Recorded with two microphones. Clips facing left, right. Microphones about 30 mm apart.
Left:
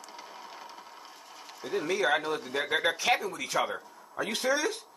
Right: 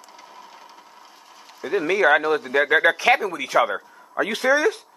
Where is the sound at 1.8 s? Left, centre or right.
Right.